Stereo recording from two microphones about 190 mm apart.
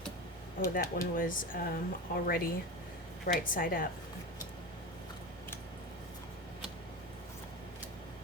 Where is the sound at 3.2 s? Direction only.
45° left (ahead or behind).